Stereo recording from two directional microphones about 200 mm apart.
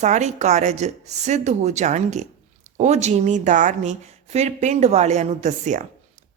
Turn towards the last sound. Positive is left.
turn(degrees=-40)  # may be behind; listen again after turning